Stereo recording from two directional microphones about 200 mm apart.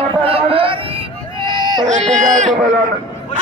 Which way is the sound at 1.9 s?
35° right (ahead or behind).